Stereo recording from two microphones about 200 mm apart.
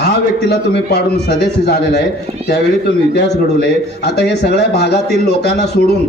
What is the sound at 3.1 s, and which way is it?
A man's voice, 55° left (ahead or behind).